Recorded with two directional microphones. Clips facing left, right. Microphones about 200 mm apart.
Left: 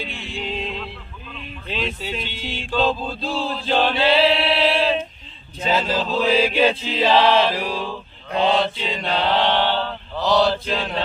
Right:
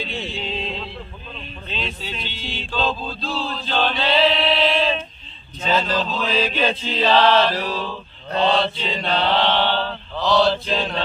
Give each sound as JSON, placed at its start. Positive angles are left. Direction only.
{"t": 0.2, "sound": "music", "side_deg": 10}
{"t": 1.3, "sound": "a sound", "side_deg": -25}
{"t": 2.0, "sound": "chant", "side_deg": 10}